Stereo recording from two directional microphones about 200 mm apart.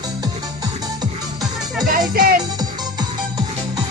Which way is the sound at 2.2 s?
50° right (ahead or behind).